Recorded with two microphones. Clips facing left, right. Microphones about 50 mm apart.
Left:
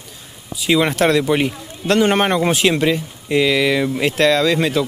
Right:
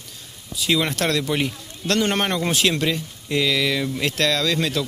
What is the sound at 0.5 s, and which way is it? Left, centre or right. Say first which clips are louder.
A man's voice: left 5 dB; centre.